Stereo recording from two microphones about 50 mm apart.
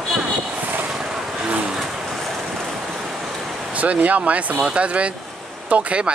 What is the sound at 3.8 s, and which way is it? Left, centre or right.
Speech, right.